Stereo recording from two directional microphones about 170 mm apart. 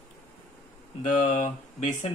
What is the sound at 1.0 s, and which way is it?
Speech, 50° left (ahead or behind).